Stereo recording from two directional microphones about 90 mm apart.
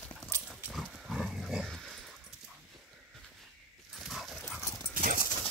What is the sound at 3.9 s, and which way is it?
Dog, centre (ahead or behind).